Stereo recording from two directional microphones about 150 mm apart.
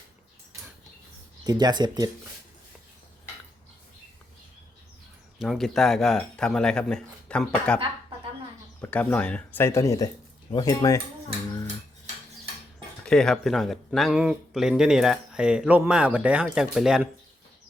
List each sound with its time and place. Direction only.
1.5 s speech: 25° right (ahead or behind)
5.4 s speech: centre (ahead or behind)
8.8 s speech: 10° left (ahead or behind)
13.1 s speech: 5° left (ahead or behind)